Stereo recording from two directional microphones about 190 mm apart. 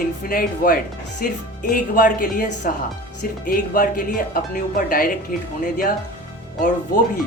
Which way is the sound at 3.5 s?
50° left (ahead or behind).